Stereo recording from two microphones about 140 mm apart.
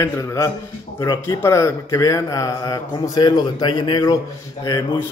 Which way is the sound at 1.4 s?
20° left (ahead or behind).